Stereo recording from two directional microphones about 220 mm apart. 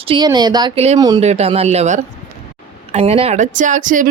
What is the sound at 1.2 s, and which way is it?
Speech, 30° right (ahead or behind).